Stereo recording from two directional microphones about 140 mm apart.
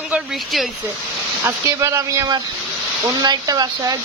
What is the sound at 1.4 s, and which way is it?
Speech, 20° right (ahead or behind).